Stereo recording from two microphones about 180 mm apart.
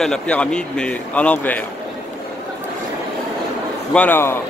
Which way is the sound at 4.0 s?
10° left (ahead or behind).